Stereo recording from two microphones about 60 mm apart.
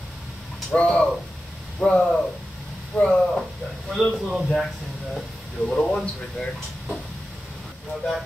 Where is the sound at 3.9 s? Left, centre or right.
Centre.